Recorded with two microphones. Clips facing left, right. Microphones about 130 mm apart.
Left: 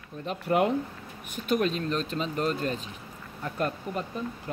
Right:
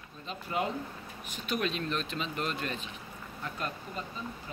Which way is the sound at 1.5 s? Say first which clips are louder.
Left 6 dB; 40° left (ahead or behind).